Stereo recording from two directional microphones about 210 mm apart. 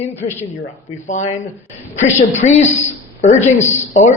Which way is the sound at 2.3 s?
35° left (ahead or behind).